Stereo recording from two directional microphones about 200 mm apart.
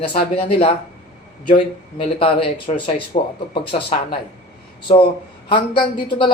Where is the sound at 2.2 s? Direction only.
25° left (ahead or behind).